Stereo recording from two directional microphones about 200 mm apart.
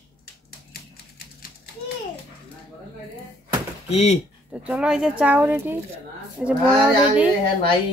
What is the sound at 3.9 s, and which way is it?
Speech, 30° left (ahead or behind).